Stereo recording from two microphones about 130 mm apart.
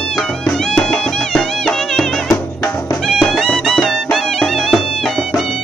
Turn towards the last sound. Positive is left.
turn(degrees=0)  # may be behind; listen again after turning